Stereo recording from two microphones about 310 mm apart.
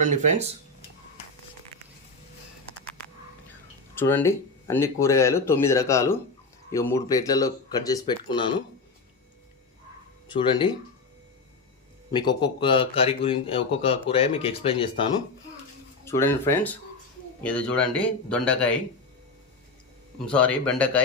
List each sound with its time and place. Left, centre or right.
0.0 s speech: right
3.9 s speech: centre
10.2 s speech: centre
12.1 s speech: centre
20.2 s speech: centre